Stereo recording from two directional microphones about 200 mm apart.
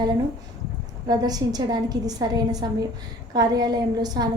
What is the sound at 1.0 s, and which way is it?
A woman's voice, 20° right (ahead or behind).